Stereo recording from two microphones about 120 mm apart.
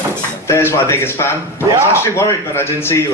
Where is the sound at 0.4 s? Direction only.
25° left (ahead or behind).